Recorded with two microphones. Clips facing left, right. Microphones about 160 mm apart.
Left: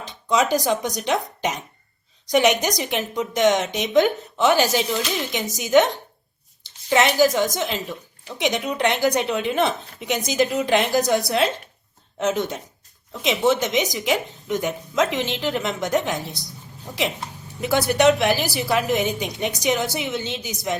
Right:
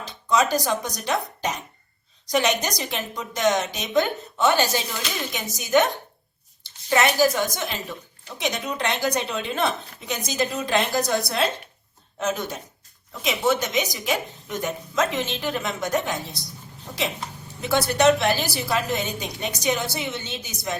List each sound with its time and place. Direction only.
0.0 s a woman's voice: 15° left (ahead or behind)
17.6 s a woman's voice: 10° left (ahead or behind)